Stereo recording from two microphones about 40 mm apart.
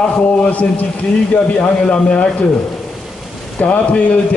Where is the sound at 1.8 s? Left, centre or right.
Left.